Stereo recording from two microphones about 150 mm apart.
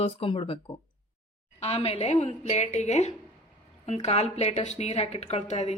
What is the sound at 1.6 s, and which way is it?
A woman's voice, 45° left (ahead or behind).